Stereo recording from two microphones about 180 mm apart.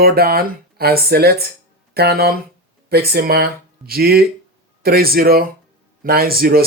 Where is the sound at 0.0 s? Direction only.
55° right (ahead or behind).